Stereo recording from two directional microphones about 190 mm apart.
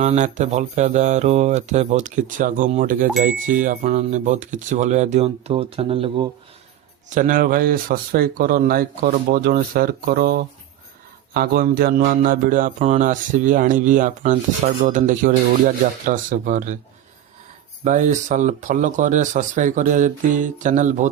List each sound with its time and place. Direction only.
0.0 s speech: 35° right (ahead or behind)
7.1 s speech: 45° right (ahead or behind)
17.8 s speech: 40° right (ahead or behind)